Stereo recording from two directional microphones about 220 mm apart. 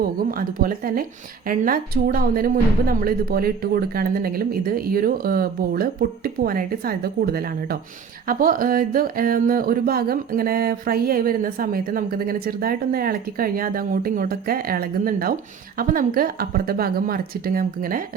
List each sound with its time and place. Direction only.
0.0 s speech: 40° right (ahead or behind)